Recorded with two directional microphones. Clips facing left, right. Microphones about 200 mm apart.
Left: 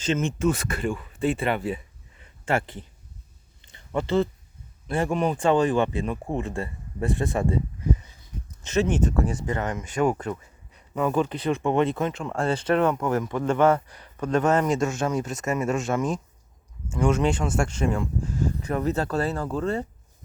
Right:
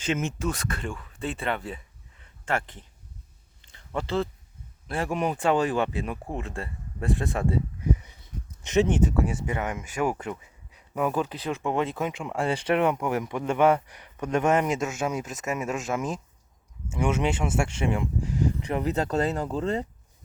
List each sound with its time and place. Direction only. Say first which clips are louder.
0.0 s speech: left 4 dB; 10° right (ahead or behind); by 2.8 s 5° left (ahead or behind)
3.9 s speech: left 4 dB; centre (ahead or behind)
7.8 s speech: left 1 dB; 15° right (ahead or behind)